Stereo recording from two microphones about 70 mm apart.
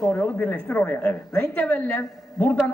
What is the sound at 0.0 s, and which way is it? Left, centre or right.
A woman's voice, left.